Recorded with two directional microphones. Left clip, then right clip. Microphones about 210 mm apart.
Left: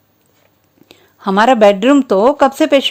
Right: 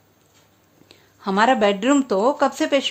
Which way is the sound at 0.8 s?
30° left (ahead or behind).